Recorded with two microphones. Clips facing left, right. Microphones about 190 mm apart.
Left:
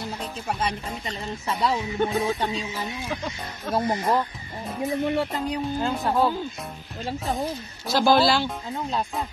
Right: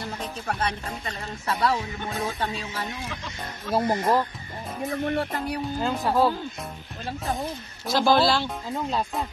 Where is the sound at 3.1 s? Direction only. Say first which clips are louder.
Left 5 dB; 45° left (ahead or behind).